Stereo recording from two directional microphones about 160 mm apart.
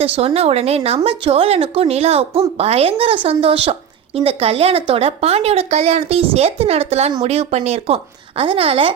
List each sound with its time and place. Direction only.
0.0 s a woman's voice: 40° right (ahead or behind)